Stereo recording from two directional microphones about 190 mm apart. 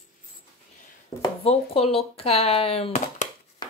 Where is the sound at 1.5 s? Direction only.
30° left (ahead or behind).